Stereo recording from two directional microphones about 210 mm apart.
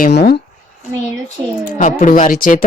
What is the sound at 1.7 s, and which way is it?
Speech, 40° left (ahead or behind).